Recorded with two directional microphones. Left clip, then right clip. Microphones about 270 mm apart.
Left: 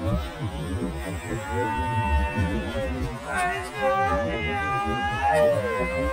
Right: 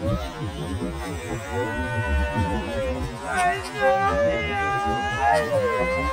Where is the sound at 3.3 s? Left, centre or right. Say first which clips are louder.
Right 4 dB; right.